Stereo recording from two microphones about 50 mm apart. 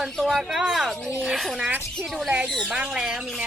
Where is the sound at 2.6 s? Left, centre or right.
Right.